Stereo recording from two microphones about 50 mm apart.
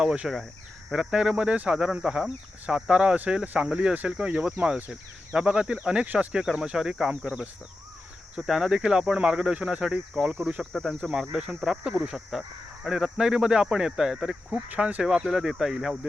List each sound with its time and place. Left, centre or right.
0.0 s speech: centre
8.4 s speech: centre
14.7 s speech: right
15.0 s speech: centre